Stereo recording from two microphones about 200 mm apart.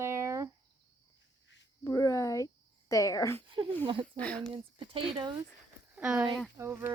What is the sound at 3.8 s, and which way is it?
Speech, 25° right (ahead or behind).